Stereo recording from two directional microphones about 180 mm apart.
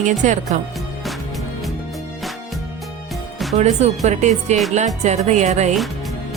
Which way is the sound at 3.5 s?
35° right (ahead or behind).